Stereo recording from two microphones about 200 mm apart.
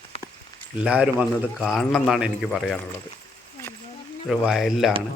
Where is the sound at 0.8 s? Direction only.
5° right (ahead or behind).